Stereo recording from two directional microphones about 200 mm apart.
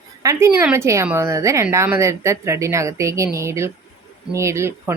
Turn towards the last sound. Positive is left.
turn(degrees=-15)  # may be behind; listen again after turning